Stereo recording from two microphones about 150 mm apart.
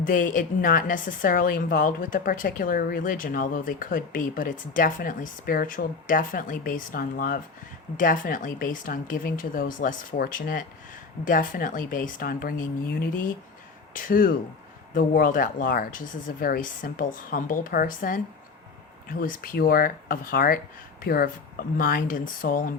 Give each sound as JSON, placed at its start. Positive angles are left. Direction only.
{"t": 0.0, "sound": "a woman's voice", "side_deg": 60}